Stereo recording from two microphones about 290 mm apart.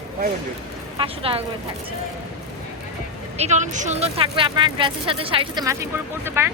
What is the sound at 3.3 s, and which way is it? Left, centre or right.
Speech, right.